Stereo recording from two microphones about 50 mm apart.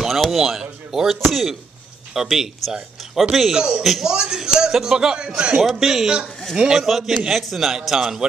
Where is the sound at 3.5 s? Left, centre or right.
Centre.